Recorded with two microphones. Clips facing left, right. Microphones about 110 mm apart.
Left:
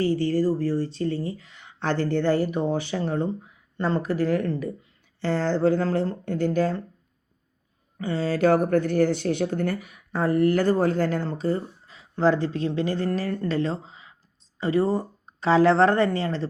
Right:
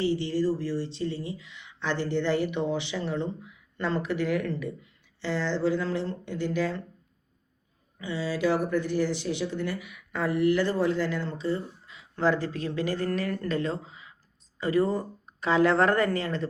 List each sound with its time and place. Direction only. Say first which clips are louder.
0.0 s speech: left 4 dB; 45° left (ahead or behind)
5.2 s speech: left 5 dB; 45° left (ahead or behind)
7.9 s speech: left 5 dB; 50° left (ahead or behind); by 16.5 s 30° left (ahead or behind)